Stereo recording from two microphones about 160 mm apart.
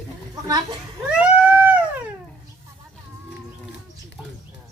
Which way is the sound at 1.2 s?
10° right (ahead or behind).